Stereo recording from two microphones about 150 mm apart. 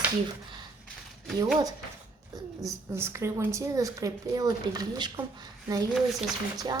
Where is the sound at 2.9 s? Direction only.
15° right (ahead or behind).